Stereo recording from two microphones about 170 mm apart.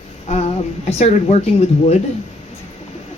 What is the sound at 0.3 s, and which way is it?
A woman's voice, 40° left (ahead or behind).